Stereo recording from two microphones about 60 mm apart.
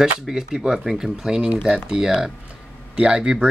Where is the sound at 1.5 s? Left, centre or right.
Right.